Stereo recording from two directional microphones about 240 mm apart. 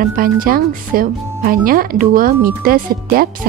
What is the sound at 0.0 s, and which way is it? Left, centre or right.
Speech, right.